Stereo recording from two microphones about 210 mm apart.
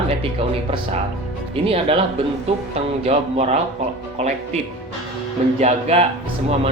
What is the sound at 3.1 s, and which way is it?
Speech, 30° right (ahead or behind).